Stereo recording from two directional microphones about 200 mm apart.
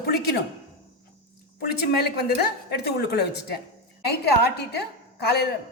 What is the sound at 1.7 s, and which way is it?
A woman's voice, 55° left (ahead or behind).